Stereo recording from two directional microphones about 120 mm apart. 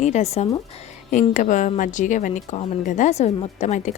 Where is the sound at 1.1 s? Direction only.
90° left.